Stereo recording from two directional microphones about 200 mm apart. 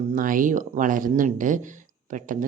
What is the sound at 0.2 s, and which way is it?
Speech, 40° right (ahead or behind).